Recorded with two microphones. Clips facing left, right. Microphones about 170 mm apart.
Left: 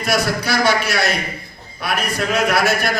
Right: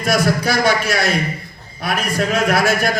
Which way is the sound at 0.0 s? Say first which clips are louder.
Right 3 dB; 50° right (ahead or behind).